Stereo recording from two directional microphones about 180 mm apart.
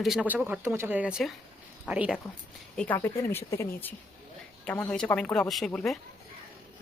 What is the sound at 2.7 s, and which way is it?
Speech, 10° left (ahead or behind).